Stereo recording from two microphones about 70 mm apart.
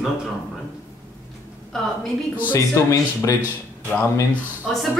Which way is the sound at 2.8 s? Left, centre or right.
Left.